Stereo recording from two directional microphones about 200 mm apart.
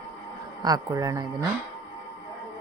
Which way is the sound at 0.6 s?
20° right (ahead or behind).